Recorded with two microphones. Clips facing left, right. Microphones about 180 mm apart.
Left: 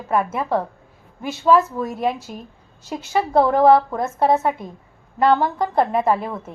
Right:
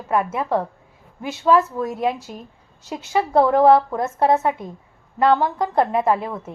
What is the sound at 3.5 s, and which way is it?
Speech, 15° right (ahead or behind).